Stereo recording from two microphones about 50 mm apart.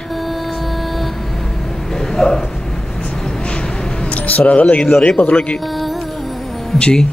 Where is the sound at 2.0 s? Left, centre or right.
Centre.